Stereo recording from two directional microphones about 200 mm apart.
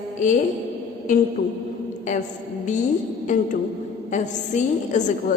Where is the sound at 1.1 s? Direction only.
40° left (ahead or behind).